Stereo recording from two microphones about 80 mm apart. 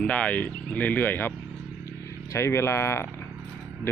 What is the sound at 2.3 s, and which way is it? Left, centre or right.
Speech, left.